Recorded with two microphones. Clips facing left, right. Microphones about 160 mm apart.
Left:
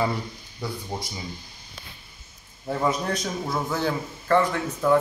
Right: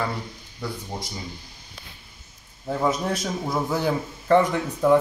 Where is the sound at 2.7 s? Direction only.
5° right (ahead or behind).